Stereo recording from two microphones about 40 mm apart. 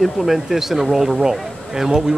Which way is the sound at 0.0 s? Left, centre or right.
Centre.